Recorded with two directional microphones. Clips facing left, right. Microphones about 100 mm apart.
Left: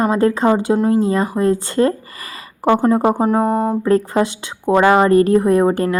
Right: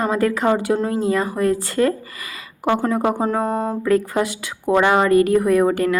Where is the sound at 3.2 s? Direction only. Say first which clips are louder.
Left 4 dB; 15° left (ahead or behind).